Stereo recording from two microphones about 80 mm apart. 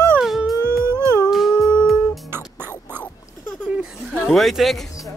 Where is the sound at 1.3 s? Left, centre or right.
Centre.